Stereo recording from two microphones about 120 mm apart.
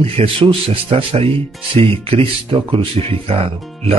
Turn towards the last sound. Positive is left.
turn(degrees=-55)  # may be behind; listen again after turning